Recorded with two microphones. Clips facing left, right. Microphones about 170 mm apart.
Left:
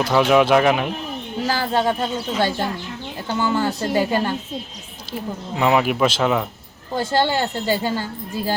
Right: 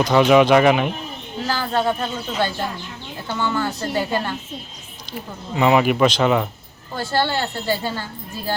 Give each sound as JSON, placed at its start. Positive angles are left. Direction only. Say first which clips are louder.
{"t": 0.0, "sound": "speech", "louder": "right 2 dB", "side_deg": 5}
{"t": 1.5, "sound": "speech", "louder": "left 1 dB", "side_deg": 10}
{"t": 5.5, "sound": "speech", "louder": "right 2 dB", "side_deg": 0}
{"t": 6.9, "sound": "speech", "louder": "left 2 dB", "side_deg": 15}